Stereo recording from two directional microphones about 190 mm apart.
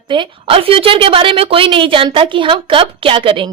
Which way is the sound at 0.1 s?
25° right (ahead or behind).